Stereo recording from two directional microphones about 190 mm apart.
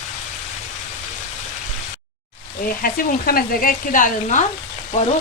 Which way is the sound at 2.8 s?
50° left (ahead or behind).